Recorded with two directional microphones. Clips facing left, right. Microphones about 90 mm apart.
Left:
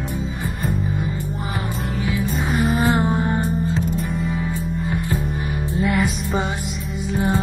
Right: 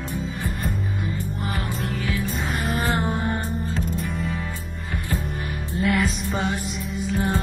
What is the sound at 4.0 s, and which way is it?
Music, centre (ahead or behind).